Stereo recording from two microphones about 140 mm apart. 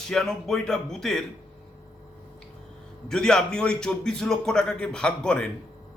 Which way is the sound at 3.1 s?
5° left (ahead or behind).